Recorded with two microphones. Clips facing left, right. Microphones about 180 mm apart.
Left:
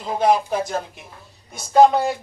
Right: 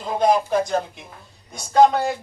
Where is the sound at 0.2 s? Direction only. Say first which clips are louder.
Even; 5° left (ahead or behind).